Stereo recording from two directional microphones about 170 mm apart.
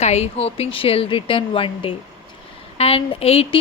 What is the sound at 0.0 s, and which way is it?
A woman's voice, 40° left (ahead or behind).